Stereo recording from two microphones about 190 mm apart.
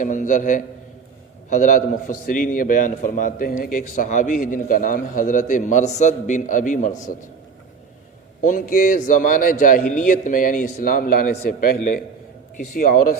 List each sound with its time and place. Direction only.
0.0 s a man's voice: 40° left (ahead or behind)
8.4 s a man's voice: 45° left (ahead or behind)